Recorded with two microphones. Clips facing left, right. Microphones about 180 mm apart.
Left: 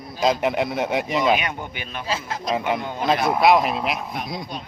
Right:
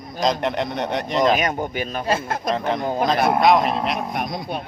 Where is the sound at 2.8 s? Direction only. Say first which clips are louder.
Right 6 dB; 40° right (ahead or behind).